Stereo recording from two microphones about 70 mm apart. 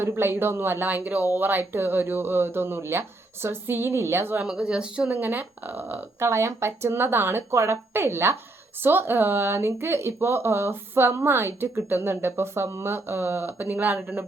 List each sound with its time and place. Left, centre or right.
0.0 s speech: right
4.4 s speech: centre